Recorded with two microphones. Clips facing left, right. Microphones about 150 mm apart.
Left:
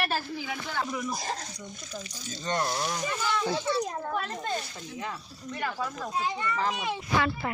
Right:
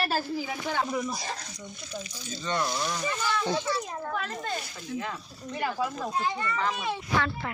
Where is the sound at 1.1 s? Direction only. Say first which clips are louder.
Left 2 dB; 45° left (ahead or behind).